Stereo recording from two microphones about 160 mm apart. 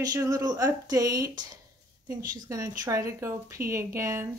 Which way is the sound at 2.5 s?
20° right (ahead or behind).